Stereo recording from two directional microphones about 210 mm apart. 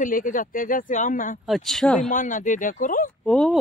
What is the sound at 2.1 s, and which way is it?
Speech, 40° left (ahead or behind).